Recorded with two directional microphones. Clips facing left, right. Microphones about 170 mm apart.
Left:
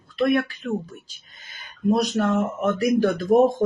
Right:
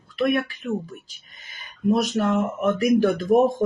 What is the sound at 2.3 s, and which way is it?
Speech, 15° right (ahead or behind).